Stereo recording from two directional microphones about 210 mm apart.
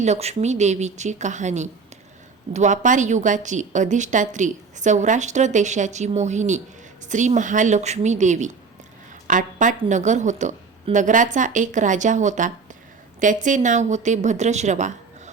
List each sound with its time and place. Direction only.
0.0 s a woman's voice: 30° right (ahead or behind)